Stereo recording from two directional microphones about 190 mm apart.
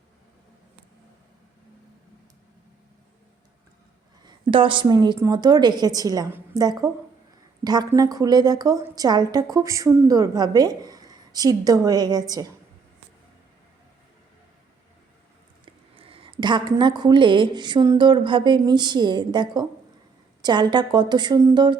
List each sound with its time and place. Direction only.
4.3 s a woman's voice: 25° right (ahead or behind)
15.6 s a woman's voice: 30° right (ahead or behind)